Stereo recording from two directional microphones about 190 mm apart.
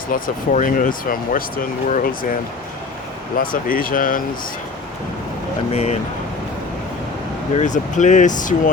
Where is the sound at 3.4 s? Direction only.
45° left (ahead or behind).